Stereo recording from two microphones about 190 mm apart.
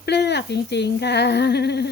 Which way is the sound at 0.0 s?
60° left (ahead or behind).